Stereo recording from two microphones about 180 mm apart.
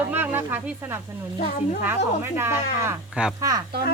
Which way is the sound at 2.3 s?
10° right (ahead or behind).